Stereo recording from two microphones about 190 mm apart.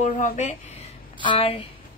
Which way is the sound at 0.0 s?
40° left (ahead or behind).